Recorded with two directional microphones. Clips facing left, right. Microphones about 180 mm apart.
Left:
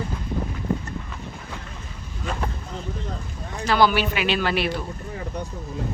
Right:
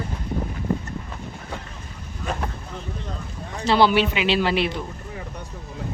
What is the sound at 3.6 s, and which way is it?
Speech, 25° right (ahead or behind).